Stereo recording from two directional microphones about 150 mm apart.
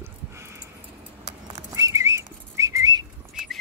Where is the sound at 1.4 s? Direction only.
20° right (ahead or behind).